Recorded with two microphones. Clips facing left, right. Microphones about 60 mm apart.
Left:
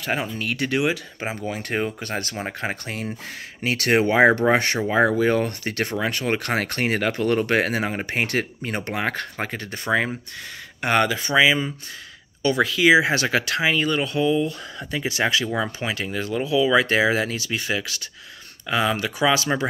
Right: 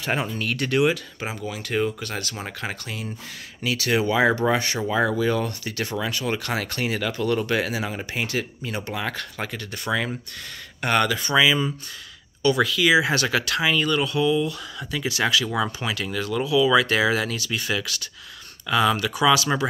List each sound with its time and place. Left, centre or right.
0.0 s speech: centre
1.3 s speech: left
3.6 s speech: left
10.8 s speech: centre